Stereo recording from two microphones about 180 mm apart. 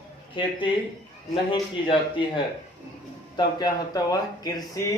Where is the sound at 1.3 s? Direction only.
25° left (ahead or behind).